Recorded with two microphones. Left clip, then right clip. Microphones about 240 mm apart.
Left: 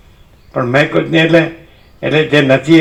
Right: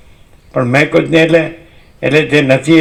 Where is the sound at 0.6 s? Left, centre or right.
Right.